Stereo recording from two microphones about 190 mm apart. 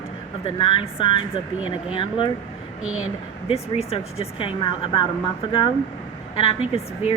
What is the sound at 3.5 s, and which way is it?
A woman's voice, 30° left (ahead or behind).